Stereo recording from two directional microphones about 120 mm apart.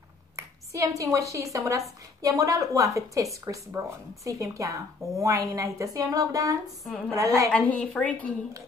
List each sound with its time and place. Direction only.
0.4 s a woman's voice: 25° right (ahead or behind)
7.5 s a woman's voice: 10° left (ahead or behind)